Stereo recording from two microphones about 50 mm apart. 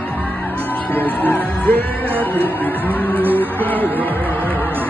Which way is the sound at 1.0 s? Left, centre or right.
Left.